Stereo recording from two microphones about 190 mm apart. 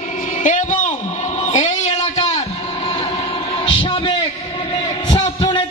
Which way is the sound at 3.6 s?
30° left (ahead or behind).